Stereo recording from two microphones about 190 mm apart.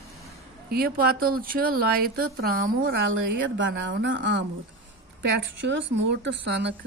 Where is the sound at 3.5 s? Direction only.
75° right (ahead or behind).